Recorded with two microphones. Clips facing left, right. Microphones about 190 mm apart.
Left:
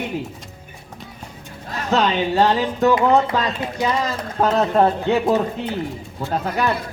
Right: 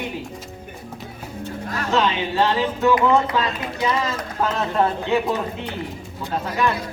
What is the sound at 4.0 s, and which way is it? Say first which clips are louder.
Speech: left 3 dB; 35° left (ahead or behind).